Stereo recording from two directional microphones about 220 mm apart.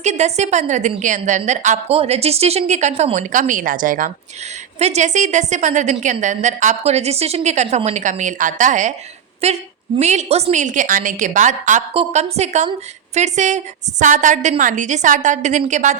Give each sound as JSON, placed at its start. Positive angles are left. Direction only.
{"t": 0.0, "sound": "a woman's voice", "side_deg": -30}